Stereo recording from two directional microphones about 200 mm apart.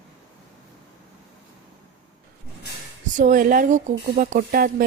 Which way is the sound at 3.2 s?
40° right (ahead or behind).